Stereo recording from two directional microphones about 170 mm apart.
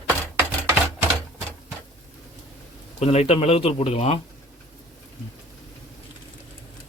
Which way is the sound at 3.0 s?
40° left (ahead or behind).